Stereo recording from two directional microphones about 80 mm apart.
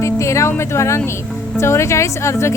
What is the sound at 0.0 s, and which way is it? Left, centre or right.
Music, left.